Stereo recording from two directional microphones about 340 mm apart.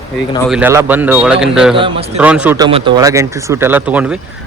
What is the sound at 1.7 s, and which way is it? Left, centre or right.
Speech, centre.